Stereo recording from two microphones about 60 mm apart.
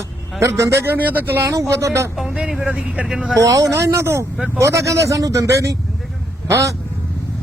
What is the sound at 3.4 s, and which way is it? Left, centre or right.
Speech, right.